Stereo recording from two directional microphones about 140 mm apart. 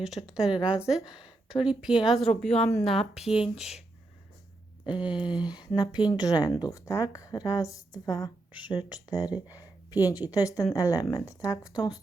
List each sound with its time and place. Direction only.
0.0 s speech: centre (ahead or behind)
4.9 s a sound: 35° left (ahead or behind)
5.4 s a woman's voice: 30° left (ahead or behind)